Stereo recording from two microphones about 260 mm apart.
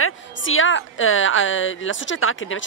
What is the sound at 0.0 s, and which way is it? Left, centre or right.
A woman's voice, left.